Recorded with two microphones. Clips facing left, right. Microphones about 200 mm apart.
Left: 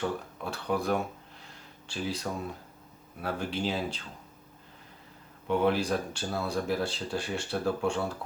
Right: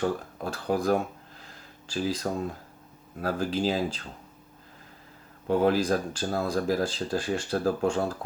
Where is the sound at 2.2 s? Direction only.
45° right (ahead or behind).